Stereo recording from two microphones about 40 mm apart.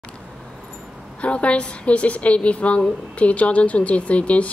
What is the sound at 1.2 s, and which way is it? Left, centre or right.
A woman's voice, left.